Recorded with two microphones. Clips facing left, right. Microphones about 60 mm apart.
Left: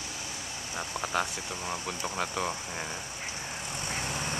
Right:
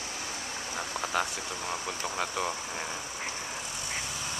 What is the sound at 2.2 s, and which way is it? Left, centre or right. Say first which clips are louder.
Speech: even; centre.